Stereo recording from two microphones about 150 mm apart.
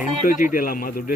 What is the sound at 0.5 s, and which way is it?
Speech, 70° left (ahead or behind).